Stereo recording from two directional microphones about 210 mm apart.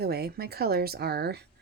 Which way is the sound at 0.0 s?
50° right (ahead or behind).